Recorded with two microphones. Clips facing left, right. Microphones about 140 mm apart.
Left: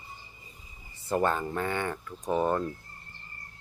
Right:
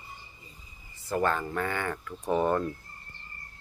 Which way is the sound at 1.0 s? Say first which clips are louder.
Left 1 dB; 20° left (ahead or behind).